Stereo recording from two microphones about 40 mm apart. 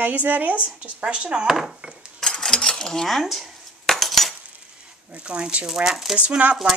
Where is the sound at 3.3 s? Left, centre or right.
Centre.